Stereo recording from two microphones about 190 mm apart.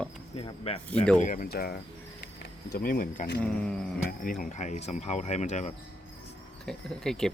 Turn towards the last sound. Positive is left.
turn(degrees=5)  # may be behind; listen again after turning